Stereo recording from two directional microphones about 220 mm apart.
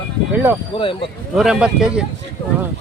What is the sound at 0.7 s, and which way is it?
Speech, 25° left (ahead or behind).